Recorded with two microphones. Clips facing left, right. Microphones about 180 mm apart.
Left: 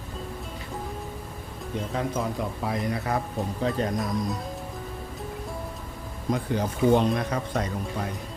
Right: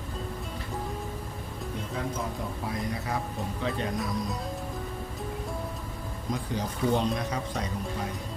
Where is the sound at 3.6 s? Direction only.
40° left (ahead or behind).